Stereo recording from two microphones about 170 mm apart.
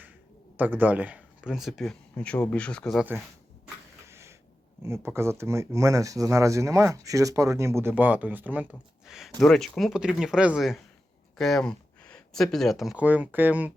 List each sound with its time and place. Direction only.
0.5 s speech: 10° right (ahead or behind)
4.0 s a sound: 15° right (ahead or behind)
4.8 s speech: 15° right (ahead or behind)